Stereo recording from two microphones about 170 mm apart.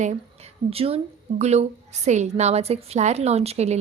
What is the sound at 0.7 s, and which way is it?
A woman's voice, 35° right (ahead or behind).